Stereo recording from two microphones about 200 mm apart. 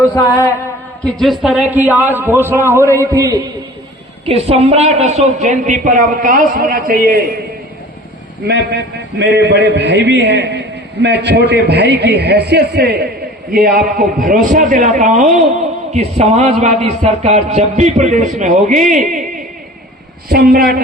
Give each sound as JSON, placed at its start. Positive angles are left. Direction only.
{"t": 0.0, "sound": "mantra", "side_deg": 15}
{"t": 1.0, "sound": "a man's voice", "side_deg": 0}
{"t": 4.3, "sound": "a man's voice", "side_deg": -30}
{"t": 8.4, "sound": "a man's voice", "side_deg": -60}